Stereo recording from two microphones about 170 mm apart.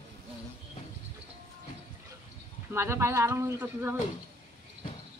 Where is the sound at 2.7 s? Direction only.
15° right (ahead or behind).